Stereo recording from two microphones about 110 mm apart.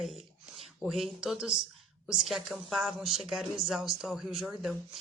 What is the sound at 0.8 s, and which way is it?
Speech, centre (ahead or behind).